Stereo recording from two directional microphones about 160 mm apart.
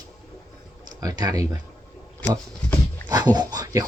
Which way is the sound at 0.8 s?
25° right (ahead or behind).